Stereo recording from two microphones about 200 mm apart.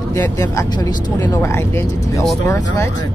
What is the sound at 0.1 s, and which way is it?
Speech, 15° left (ahead or behind).